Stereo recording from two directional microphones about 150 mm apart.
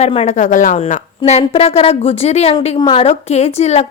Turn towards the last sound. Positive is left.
turn(degrees=45)  # may be behind; listen again after turning